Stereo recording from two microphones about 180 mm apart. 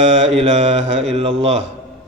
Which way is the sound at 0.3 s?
40° right (ahead or behind).